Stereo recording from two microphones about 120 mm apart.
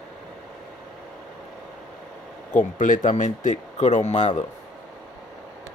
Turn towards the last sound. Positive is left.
turn(degrees=70)  # may be behind; listen again after turning